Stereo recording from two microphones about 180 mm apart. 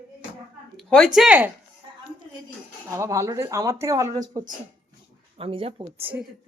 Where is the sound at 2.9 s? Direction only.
15° right (ahead or behind).